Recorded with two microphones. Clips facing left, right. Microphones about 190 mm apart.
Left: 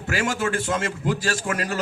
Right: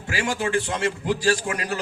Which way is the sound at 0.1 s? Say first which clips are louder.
Even; 45° left (ahead or behind).